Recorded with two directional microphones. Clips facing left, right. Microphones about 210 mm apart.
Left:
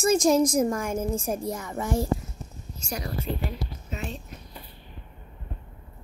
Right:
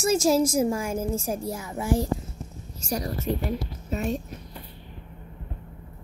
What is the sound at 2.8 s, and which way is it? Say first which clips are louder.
A woman's voice: right 4 dB; 40° right (ahead or behind).